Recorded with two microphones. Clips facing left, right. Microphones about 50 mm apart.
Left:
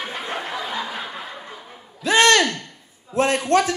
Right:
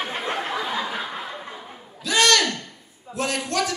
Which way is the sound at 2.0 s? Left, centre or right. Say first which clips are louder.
Left 4 dB; left.